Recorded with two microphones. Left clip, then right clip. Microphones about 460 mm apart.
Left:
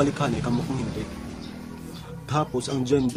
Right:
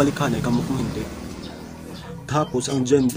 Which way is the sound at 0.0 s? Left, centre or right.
Left.